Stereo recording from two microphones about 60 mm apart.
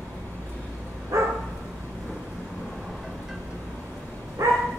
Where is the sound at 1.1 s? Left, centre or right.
Right.